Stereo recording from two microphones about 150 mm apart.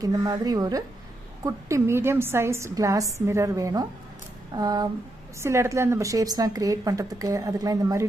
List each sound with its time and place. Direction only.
0.0 s a woman's voice: 25° right (ahead or behind)